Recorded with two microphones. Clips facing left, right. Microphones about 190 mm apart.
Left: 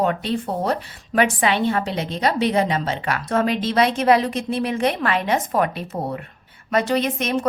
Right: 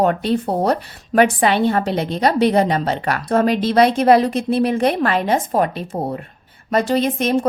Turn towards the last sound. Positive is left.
turn(degrees=-30)  # may be behind; listen again after turning